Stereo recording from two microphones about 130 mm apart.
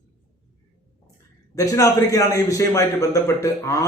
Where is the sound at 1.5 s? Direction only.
25° left (ahead or behind).